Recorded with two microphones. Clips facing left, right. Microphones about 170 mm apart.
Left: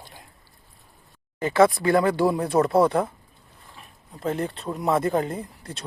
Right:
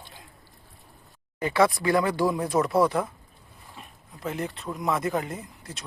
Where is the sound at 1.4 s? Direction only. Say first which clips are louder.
Left 4 dB; 25° left (ahead or behind).